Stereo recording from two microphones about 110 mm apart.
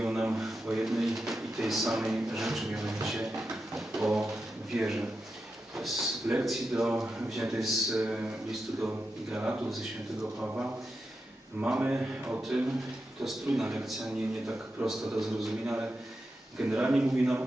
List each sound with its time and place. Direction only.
0.0 s a sound: 5° right (ahead or behind)
0.3 s drawer open or close: 5° right (ahead or behind)
4.8 s a man's voice: 5° right (ahead or behind)
5.7 s a sound: centre (ahead or behind)
6.4 s a man's voice: centre (ahead or behind)
9.3 s a man's voice: 10° right (ahead or behind)